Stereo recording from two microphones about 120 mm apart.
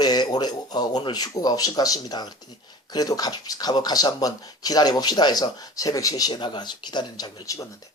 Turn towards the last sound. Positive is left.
turn(degrees=30)  # may be behind; listen again after turning